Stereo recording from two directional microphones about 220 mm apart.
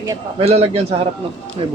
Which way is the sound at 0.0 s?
15° right (ahead or behind).